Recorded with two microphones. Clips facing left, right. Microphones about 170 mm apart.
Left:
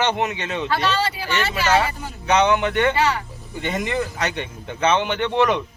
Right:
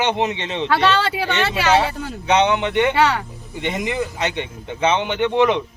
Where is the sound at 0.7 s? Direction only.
70° right (ahead or behind).